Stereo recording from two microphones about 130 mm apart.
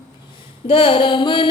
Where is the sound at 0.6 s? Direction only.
40° left (ahead or behind).